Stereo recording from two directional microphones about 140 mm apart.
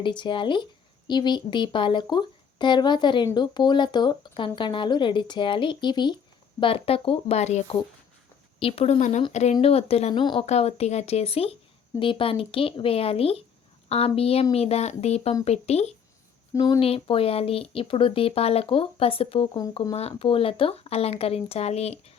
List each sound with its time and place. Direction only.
0.0 s speech: 35° left (ahead or behind)
10.4 s speech: 50° left (ahead or behind)
16.6 s speech: 25° left (ahead or behind)
16.8 s speech: 45° left (ahead or behind)